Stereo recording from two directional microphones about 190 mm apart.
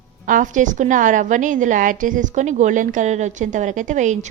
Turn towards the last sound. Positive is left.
turn(degrees=-40)  # may be behind; listen again after turning